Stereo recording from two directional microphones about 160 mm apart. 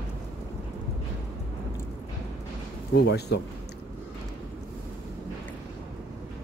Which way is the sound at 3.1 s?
90° left.